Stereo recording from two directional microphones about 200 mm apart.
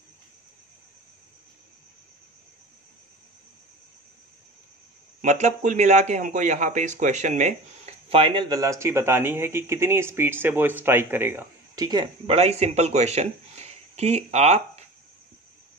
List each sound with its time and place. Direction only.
5.2 s a man's voice: 40° right (ahead or behind)